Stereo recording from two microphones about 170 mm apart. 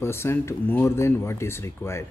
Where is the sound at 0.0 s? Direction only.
15° left (ahead or behind).